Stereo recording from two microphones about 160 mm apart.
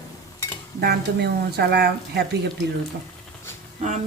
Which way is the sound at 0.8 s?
85° right.